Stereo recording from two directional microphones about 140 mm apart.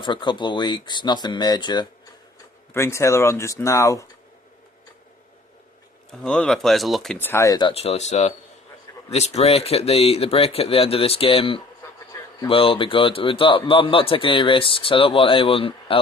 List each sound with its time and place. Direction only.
0.0 s speech: 35° left (ahead or behind)
2.7 s speech: 20° left (ahead or behind)
6.1 s speech: 5° left (ahead or behind)
7.2 s speech: 15° left (ahead or behind)
7.7 s speech: 45° left (ahead or behind)